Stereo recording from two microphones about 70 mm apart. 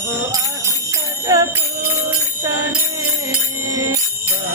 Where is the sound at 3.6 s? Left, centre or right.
Right.